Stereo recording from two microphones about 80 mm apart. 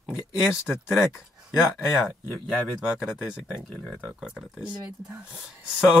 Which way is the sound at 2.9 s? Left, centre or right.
Centre.